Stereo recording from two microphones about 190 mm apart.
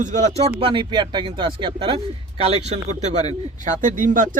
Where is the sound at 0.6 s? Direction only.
25° right (ahead or behind).